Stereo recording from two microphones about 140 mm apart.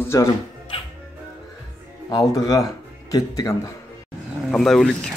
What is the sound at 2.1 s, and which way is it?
Speech, 25° left (ahead or behind).